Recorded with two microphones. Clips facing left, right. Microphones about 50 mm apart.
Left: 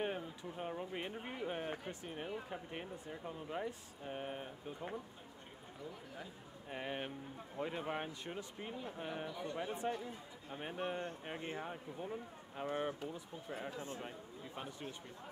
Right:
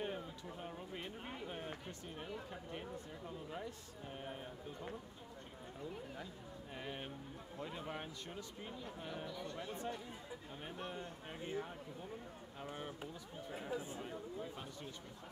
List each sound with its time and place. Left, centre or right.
0.0 s speech: left
6.7 s speech: left